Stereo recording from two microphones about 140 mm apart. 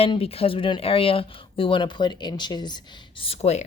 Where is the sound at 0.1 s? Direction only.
45° left (ahead or behind).